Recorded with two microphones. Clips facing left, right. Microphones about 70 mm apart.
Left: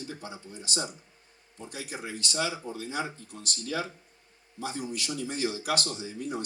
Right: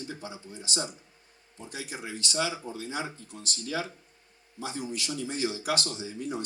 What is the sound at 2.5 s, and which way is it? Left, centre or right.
Speech, right.